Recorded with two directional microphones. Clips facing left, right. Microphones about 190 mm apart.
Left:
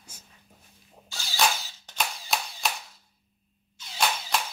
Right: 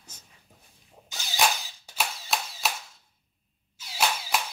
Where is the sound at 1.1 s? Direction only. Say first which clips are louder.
Right 1 dB; 20° right (ahead or behind).